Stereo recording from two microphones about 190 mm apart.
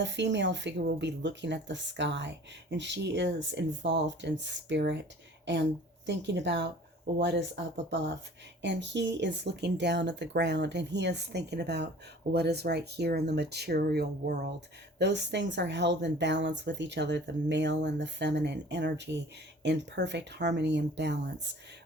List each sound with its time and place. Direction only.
0.0 s speech: 70° right (ahead or behind)
6.1 s speech: 70° right (ahead or behind)